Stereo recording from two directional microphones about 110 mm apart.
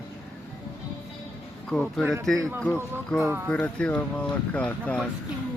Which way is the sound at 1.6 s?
5° left (ahead or behind).